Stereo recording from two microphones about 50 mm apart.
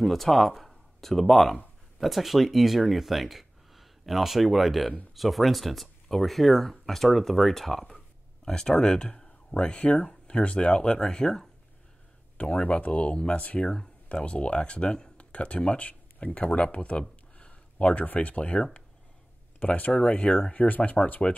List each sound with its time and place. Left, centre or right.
0.0 s speech: centre
12.4 s speech: left
17.4 s a sound: left
18.0 s speech: left
19.6 s speech: left